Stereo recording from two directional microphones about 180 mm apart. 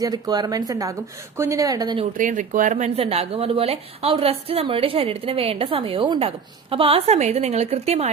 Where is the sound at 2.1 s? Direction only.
45° right (ahead or behind).